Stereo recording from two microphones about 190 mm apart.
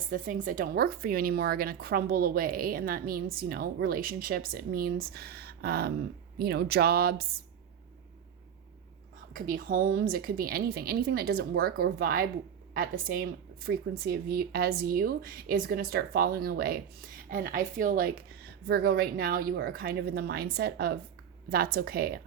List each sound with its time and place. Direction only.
0.1 s speech: 45° right (ahead or behind)
9.3 s speech: 45° right (ahead or behind)